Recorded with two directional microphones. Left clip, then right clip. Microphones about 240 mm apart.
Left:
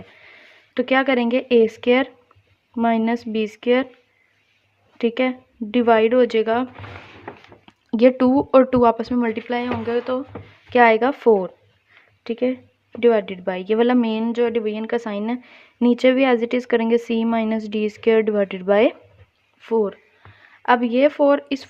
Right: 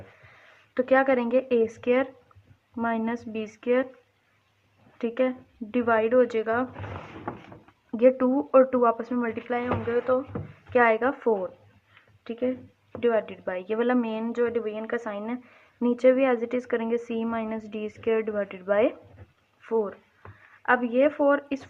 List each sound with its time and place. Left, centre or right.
0.7 s a woman's voice: left
4.9 s a woman's voice: left
7.9 s a woman's voice: left